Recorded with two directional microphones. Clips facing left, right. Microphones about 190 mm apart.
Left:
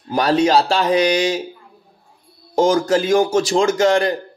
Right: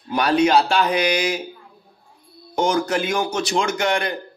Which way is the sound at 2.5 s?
35° left (ahead or behind).